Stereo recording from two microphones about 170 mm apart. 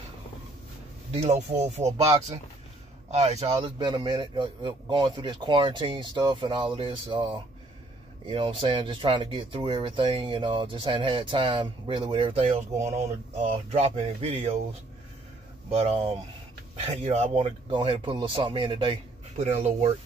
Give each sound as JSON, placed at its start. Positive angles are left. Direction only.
{"t": 1.1, "sound": "a man's voice", "side_deg": -40}
{"t": 1.8, "sound": "speech", "side_deg": -20}
{"t": 3.1, "sound": "speech", "side_deg": -40}
{"t": 8.3, "sound": "a man's voice", "side_deg": -30}
{"t": 15.7, "sound": "a man's voice", "side_deg": -40}